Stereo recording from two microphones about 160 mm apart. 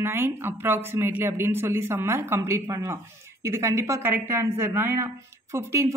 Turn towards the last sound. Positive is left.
turn(degrees=-15)  # may be behind; listen again after turning